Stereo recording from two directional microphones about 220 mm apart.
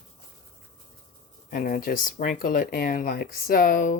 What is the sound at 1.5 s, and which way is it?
Speech, 40° left (ahead or behind).